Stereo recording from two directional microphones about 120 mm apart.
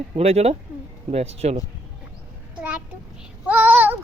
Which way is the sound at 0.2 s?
60° right (ahead or behind).